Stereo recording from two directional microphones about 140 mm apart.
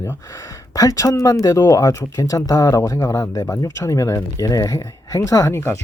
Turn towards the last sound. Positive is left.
turn(degrees=20)  # may be behind; listen again after turning